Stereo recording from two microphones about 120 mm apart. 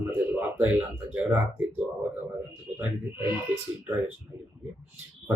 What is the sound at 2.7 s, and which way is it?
Speech, 20° right (ahead or behind).